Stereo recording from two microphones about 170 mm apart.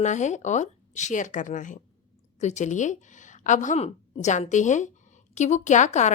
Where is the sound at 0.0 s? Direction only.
45° left (ahead or behind).